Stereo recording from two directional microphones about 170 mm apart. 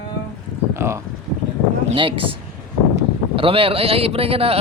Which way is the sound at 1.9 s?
30° right (ahead or behind).